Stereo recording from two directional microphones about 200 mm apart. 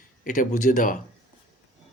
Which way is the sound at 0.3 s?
40° left (ahead or behind).